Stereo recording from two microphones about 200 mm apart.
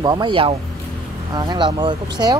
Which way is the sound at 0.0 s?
20° right (ahead or behind).